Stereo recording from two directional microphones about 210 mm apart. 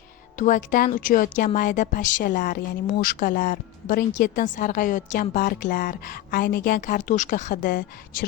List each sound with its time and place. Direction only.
0.3 s speech: 40° left (ahead or behind)